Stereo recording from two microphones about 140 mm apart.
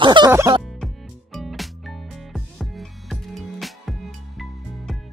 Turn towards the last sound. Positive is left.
turn(degrees=0)  # may be behind; listen again after turning